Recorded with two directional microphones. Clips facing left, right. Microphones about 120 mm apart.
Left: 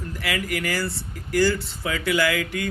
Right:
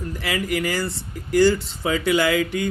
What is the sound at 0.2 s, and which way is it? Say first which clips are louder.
Speech: right 3 dB; 25° right (ahead or behind).